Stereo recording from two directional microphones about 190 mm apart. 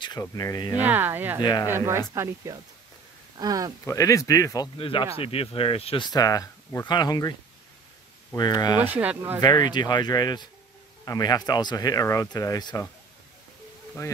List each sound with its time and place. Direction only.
0.0 s speech: 20° left (ahead or behind)
0.7 s speech: 10° right (ahead or behind)
1.4 s speech: 20° left (ahead or behind)
1.7 s speech: 15° right (ahead or behind)
3.8 s speech: 15° left (ahead or behind)
4.7 s speech: 30° left (ahead or behind)
8.4 s speech: 20° left (ahead or behind)
8.7 s speech: 10° right (ahead or behind)
9.4 s speech: 20° left (ahead or behind)
14.0 s speech: 15° left (ahead or behind)